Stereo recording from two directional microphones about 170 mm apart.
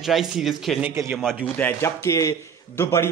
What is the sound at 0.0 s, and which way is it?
Speech, centre (ahead or behind).